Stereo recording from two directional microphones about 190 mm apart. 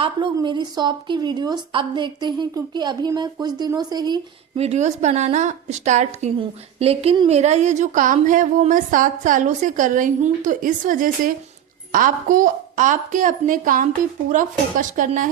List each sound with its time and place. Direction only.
0.3 s a woman's voice: 25° right (ahead or behind); by 15.3 s 40° right (ahead or behind)